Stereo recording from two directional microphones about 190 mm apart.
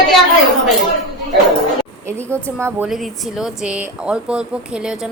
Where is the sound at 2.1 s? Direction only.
15° right (ahead or behind).